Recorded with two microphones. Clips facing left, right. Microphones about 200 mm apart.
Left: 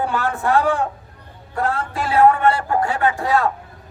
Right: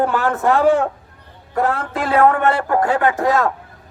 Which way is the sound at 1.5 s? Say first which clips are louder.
Right 3 dB; 55° right (ahead or behind).